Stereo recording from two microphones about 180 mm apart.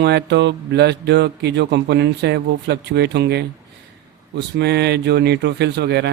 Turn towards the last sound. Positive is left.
turn(degrees=-65)  # may be behind; listen again after turning